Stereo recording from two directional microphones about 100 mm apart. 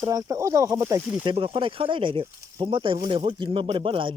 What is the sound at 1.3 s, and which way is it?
Speech, 60° right (ahead or behind).